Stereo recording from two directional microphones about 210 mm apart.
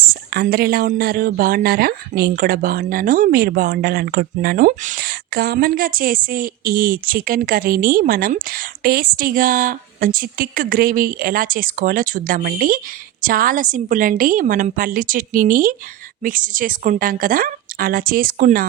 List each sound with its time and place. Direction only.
0.1 s a woman's voice: 45° right (ahead or behind)